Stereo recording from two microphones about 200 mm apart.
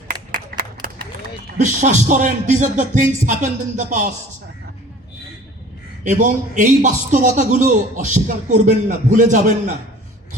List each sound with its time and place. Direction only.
0.5 s clapping: 50° right (ahead or behind)
1.5 s a man's voice: 35° right (ahead or behind)
6.1 s a man's voice: 40° right (ahead or behind)